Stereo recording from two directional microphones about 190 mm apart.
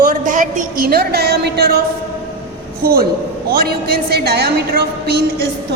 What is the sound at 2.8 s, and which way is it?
A woman's voice, 50° right (ahead or behind).